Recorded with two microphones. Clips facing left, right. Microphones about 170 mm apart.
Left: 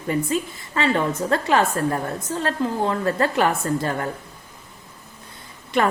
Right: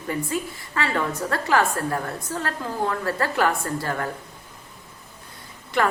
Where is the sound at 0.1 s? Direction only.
20° left (ahead or behind).